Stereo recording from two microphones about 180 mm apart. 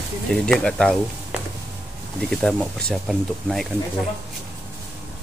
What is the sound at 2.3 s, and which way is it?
Speech, 5° left (ahead or behind).